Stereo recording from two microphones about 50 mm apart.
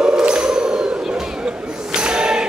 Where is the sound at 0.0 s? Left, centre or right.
Centre.